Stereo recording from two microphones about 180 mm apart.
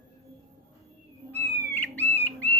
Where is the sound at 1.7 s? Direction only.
10° left (ahead or behind).